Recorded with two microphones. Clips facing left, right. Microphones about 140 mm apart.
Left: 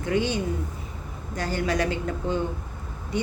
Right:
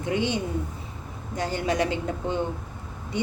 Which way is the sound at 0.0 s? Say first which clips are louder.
Left 1 dB; 20° right (ahead or behind).